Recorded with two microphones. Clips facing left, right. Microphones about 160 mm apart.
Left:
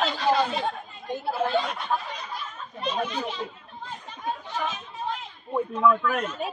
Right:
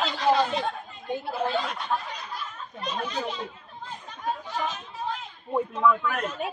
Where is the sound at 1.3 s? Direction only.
Centre (ahead or behind).